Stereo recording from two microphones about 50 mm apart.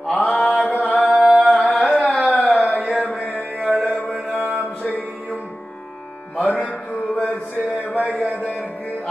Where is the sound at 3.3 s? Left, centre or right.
Right.